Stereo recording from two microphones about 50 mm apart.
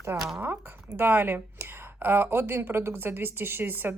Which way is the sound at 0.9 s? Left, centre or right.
Right.